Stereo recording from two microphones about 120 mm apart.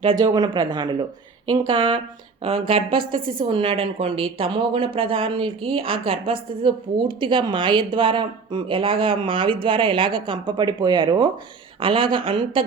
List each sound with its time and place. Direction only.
0.2 s speech: 35° right (ahead or behind)
2.4 s a woman's voice: 50° right (ahead or behind)